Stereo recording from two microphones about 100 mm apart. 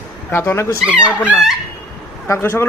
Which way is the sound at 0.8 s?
10° right (ahead or behind).